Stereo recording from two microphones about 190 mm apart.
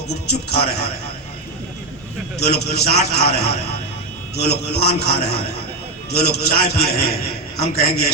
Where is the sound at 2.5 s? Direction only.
55° left (ahead or behind).